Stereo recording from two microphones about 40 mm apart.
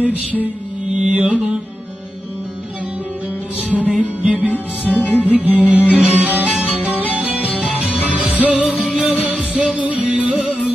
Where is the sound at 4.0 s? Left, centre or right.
Right.